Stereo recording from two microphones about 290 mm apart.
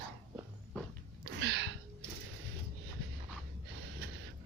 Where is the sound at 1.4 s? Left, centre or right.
Right.